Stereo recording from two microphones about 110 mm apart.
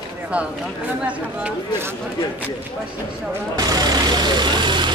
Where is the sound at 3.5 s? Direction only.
35° right (ahead or behind).